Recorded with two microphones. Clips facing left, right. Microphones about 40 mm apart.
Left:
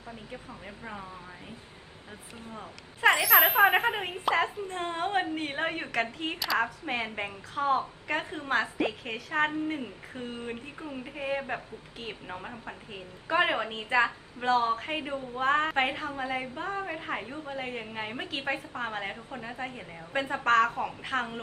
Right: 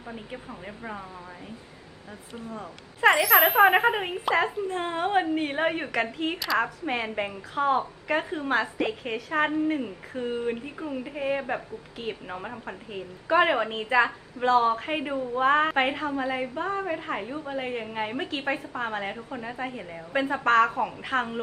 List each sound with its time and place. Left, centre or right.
0.1 s a woman's voice: centre
3.0 s a woman's voice: centre
14.8 s a woman's voice: centre